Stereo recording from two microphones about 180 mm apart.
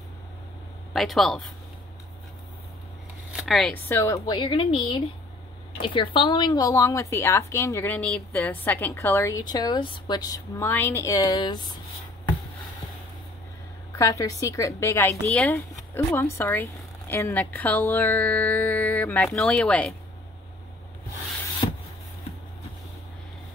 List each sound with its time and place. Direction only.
0.9 s speech: centre (ahead or behind)
3.3 s a woman's voice: centre (ahead or behind); by 11.6 s 20° left (ahead or behind)
13.9 s a woman's voice: 20° left (ahead or behind)